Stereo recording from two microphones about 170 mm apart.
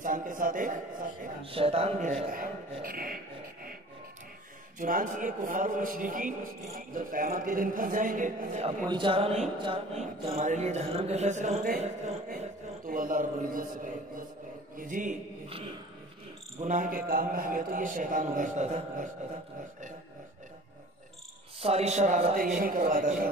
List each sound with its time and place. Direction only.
0.0 s a man's voice: 50° right (ahead or behind)
1.4 s a man's voice: 35° right (ahead or behind); by 3.2 s 60° right (ahead or behind)
4.7 s a man's voice: 50° right (ahead or behind)
8.8 s speech: 30° right (ahead or behind)
12.8 s a man's voice: 55° right (ahead or behind)
16.5 s a man's voice: 45° right (ahead or behind)
21.5 s a man's voice: 35° right (ahead or behind); by 23.1 s 55° right (ahead or behind)